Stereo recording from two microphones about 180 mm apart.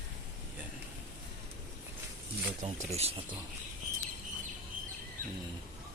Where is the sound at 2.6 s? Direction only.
35° right (ahead or behind).